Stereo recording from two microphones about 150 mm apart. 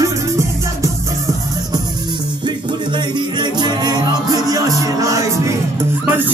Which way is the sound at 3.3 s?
30° right (ahead or behind).